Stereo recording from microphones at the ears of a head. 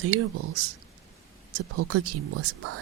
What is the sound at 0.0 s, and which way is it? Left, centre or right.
Speech, right.